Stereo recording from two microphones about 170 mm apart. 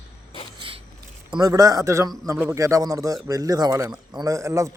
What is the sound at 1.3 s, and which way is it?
A man's voice, 25° right (ahead or behind).